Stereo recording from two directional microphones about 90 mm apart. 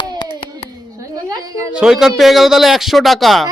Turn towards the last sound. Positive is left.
turn(degrees=0)  # may be behind; listen again after turning